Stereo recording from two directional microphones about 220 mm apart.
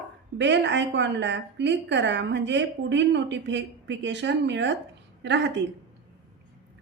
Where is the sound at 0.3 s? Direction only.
55° right (ahead or behind).